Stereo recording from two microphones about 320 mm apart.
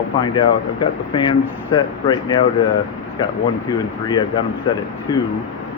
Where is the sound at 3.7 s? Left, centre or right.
Centre.